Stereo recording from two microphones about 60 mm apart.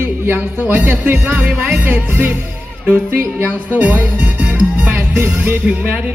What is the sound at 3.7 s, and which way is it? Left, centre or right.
Speech, right.